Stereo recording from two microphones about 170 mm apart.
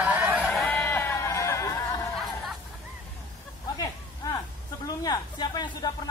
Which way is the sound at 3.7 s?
20° left (ahead or behind).